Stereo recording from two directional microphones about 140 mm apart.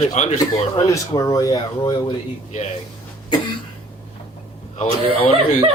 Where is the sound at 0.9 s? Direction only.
25° left (ahead or behind).